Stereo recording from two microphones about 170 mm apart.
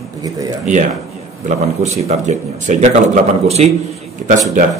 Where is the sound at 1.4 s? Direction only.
40° right (ahead or behind).